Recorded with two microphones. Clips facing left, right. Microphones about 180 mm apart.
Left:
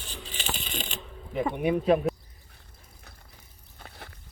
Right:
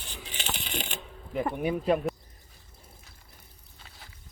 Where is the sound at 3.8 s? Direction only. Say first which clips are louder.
Left 7 dB; 60° left (ahead or behind).